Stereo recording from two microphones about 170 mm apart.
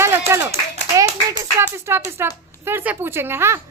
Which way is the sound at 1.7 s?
15° right (ahead or behind).